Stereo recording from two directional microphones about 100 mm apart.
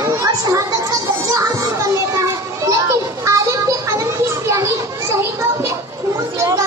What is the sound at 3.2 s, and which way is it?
Children playing, 30° right (ahead or behind).